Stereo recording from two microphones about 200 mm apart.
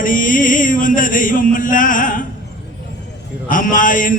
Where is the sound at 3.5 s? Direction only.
40° left (ahead or behind).